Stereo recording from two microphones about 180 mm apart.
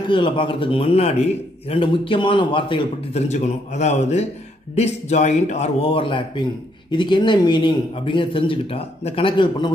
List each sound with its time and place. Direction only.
0.0 s a man's voice: 25° left (ahead or behind)